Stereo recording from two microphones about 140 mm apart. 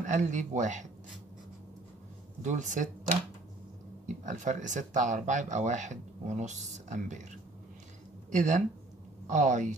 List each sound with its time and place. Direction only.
0.0 s speech: 60° right (ahead or behind)
2.4 s speech: 65° right (ahead or behind)
4.2 s speech: 60° right (ahead or behind)
8.3 s speech: 60° right (ahead or behind)